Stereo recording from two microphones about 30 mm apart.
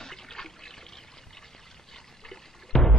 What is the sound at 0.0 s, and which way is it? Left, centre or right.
Pour, centre.